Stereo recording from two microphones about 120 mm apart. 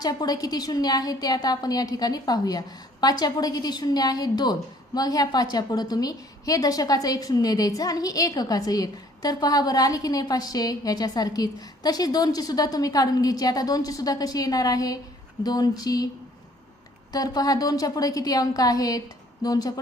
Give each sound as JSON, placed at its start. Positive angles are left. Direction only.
{"t": 0.0, "sound": "a woman's voice", "side_deg": 30}
{"t": 17.1, "sound": "a woman's voice", "side_deg": 30}